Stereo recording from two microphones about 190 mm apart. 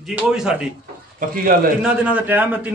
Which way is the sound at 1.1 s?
45° right (ahead or behind).